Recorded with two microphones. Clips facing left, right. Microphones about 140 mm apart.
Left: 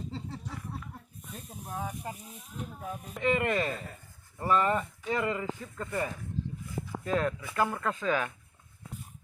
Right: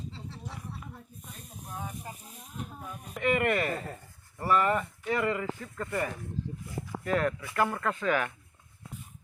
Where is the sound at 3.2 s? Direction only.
20° left (ahead or behind).